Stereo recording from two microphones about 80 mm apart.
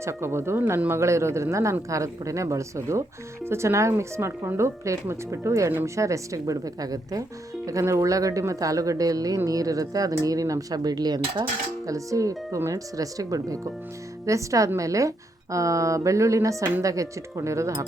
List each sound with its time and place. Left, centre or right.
0.0 s speech: right
11.9 s speech: right